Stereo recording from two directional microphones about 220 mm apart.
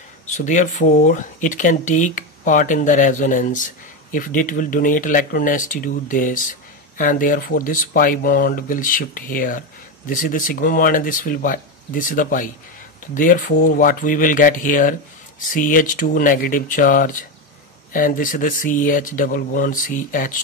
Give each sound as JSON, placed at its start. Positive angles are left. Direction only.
{"t": 0.3, "sound": "speech", "side_deg": 35}